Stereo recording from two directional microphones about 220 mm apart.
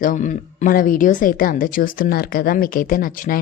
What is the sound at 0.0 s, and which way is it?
A woman's voice, 35° left (ahead or behind).